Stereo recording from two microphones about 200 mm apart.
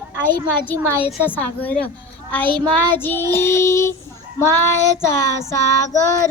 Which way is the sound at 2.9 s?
10° left (ahead or behind).